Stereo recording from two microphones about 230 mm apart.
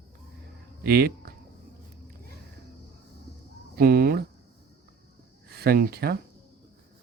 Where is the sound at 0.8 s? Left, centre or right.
Right.